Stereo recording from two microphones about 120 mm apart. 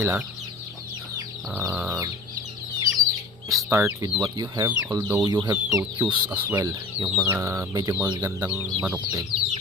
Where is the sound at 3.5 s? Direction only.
25° right (ahead or behind).